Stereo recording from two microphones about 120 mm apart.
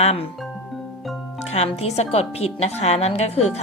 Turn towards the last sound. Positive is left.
turn(degrees=60)  # may be behind; listen again after turning